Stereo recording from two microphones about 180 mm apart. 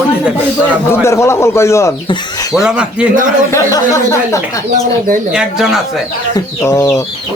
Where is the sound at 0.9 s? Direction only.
15° left (ahead or behind).